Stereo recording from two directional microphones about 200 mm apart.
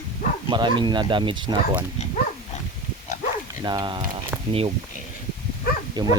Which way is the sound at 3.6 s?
20° right (ahead or behind).